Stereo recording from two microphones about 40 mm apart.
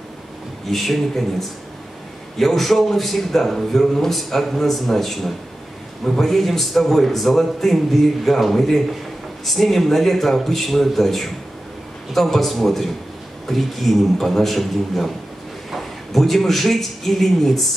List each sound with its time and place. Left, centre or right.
0.7 s a man's voice: centre
2.3 s a man's voice: centre